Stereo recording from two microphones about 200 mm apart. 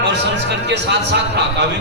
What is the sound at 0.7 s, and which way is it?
Speech, 60° right (ahead or behind).